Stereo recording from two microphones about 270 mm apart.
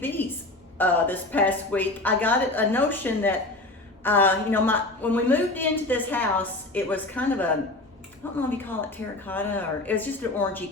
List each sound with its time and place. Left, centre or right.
0.0 s a woman's voice: centre